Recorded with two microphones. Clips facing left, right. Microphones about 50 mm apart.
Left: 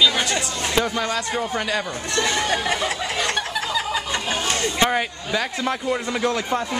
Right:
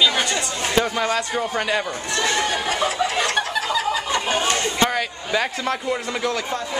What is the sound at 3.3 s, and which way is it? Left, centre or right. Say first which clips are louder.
Snicker: right 2 dB; centre.